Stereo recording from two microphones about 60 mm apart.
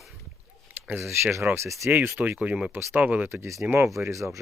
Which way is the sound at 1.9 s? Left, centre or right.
Right.